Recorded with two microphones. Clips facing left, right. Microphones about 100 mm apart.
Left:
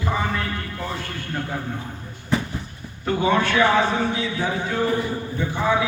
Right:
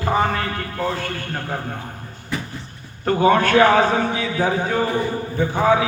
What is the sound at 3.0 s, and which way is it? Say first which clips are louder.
A man's voice: right 4 dB; 50° right (ahead or behind).